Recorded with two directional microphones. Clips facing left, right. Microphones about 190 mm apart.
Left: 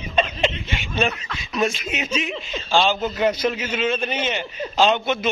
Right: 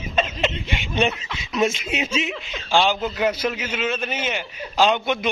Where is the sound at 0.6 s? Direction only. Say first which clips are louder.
Right 1 dB; 20° right (ahead or behind).